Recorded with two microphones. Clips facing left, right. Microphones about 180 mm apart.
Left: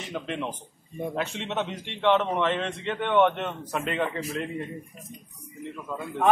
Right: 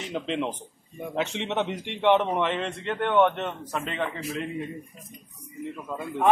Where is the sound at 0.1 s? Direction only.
20° right (ahead or behind); by 4.5 s centre (ahead or behind).